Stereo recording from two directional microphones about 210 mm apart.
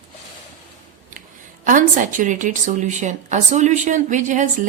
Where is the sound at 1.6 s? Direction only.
40° right (ahead or behind).